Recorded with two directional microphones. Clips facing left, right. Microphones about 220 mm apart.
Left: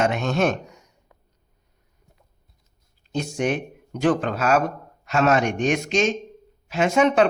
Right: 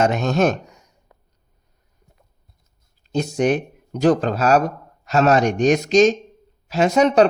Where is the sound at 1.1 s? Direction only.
40° right (ahead or behind).